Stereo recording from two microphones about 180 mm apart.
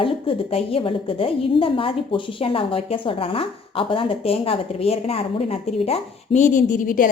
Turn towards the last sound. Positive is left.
turn(degrees=50)  # may be behind; listen again after turning